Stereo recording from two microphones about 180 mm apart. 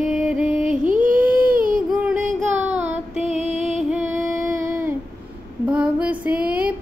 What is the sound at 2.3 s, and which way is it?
Child singing, 40° right (ahead or behind).